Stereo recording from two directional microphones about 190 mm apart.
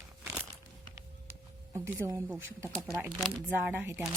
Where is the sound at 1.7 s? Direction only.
15° right (ahead or behind).